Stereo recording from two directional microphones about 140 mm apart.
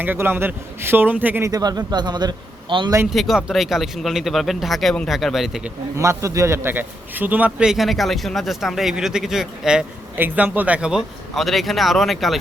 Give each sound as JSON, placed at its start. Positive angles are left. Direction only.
{"t": 0.0, "sound": "a man's voice", "side_deg": -15}
{"t": 1.5, "sound": "a man's voice", "side_deg": -25}
{"t": 3.1, "sound": "a man's voice", "side_deg": 0}
{"t": 6.0, "sound": "a man's voice", "side_deg": -20}